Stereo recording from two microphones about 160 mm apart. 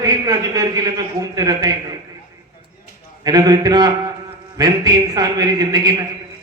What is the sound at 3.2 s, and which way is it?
A man's voice, 25° right (ahead or behind).